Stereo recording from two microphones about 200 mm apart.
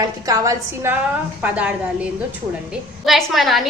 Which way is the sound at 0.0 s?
15° right (ahead or behind).